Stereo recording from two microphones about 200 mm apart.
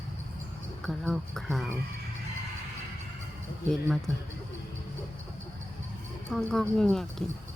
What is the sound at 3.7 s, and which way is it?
Speech, centre (ahead or behind).